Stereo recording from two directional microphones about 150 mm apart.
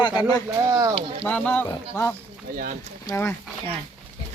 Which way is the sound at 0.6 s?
20° right (ahead or behind).